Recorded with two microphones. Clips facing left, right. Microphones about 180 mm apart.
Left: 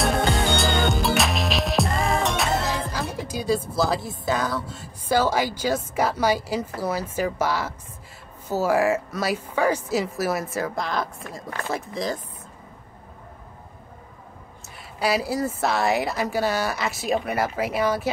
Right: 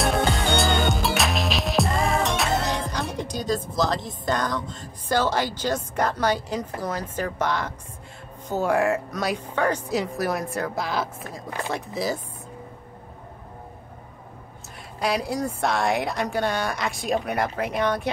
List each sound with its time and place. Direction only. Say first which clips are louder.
0.0 s music: left 1 dB; centre (ahead or behind)
6.8 s a woman's voice: left 3 dB; 10° left (ahead or behind)
15.0 s a woman's voice: left 2 dB; 5° left (ahead or behind)